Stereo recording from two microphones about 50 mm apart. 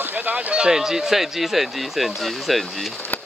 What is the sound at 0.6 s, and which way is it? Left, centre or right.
Speech, centre.